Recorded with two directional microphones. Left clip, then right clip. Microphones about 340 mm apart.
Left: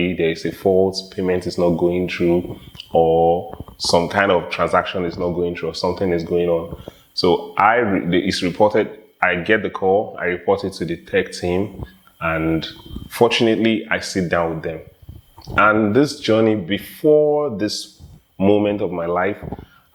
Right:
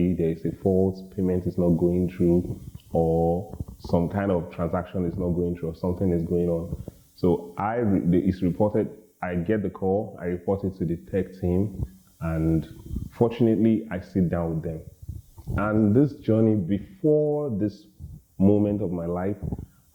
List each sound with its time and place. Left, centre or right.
0.0 s speech: centre
0.7 s speech: left
0.9 s speech: centre
3.1 s speech: left
3.8 s speech: centre